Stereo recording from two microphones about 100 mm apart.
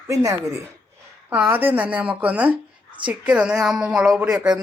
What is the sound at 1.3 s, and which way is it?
Speech, 20° right (ahead or behind).